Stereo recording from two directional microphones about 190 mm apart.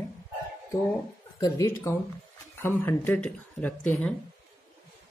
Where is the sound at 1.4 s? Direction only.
20° left (ahead or behind).